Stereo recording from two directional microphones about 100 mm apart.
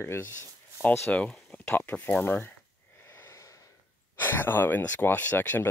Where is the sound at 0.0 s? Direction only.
25° left (ahead or behind).